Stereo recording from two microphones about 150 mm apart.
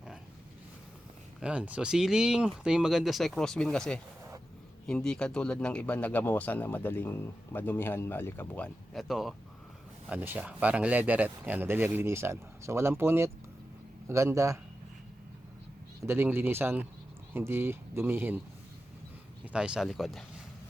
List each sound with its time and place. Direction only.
1.4 s speech: 10° right (ahead or behind)
10.1 s a man's voice: 10° right (ahead or behind)
16.0 s speech: 15° right (ahead or behind)
19.5 s speech: 5° right (ahead or behind)